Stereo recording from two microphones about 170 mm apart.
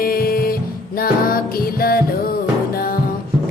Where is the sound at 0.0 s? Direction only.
60° left (ahead or behind).